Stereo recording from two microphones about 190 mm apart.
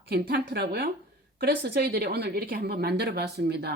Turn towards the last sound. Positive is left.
turn(degrees=-60)  # may be behind; listen again after turning